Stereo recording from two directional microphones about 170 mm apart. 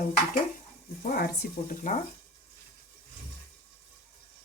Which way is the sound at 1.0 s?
60° left (ahead or behind).